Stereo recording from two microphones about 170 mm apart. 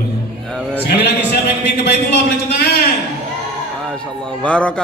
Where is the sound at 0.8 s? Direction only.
70° left (ahead or behind).